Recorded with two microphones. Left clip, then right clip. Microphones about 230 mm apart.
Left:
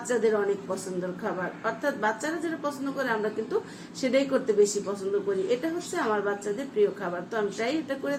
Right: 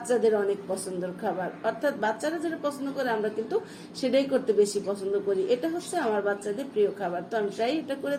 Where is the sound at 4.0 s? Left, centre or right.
Centre.